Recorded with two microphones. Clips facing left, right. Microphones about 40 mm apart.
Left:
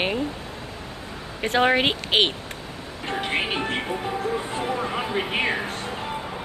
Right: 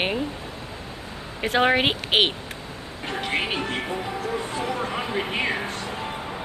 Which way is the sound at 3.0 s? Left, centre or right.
Centre.